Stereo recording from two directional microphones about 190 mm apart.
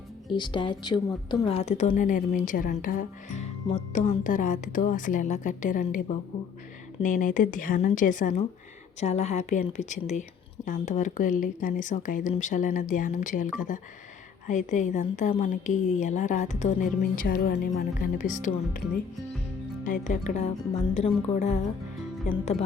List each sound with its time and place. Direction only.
0.3 s a woman's voice: 25° left (ahead or behind); by 6.0 s 45° left (ahead or behind)
7.0 s a woman's voice: 45° left (ahead or behind)
19.8 s a woman's voice: 40° left (ahead or behind)